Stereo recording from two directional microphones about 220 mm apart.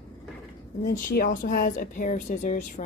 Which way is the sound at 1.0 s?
40° left (ahead or behind).